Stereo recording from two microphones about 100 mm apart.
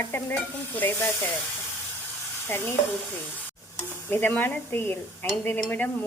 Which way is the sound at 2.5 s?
20° left (ahead or behind).